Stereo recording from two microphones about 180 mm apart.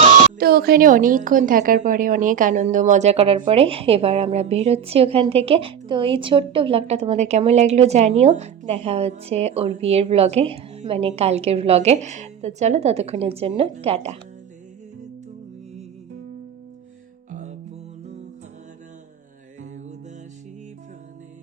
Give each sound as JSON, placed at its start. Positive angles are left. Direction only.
{"t": 0.3, "sound": "a woman's voice", "side_deg": -55}